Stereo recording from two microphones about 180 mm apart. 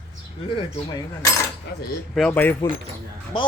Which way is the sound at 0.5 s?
20° left (ahead or behind).